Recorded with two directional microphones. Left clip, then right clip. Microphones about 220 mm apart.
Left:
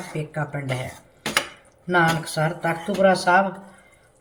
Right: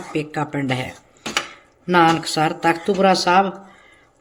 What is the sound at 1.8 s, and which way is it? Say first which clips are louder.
Speech: right 5 dB; 50° right (ahead or behind).